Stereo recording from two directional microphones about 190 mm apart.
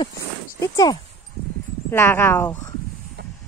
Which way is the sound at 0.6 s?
20° left (ahead or behind).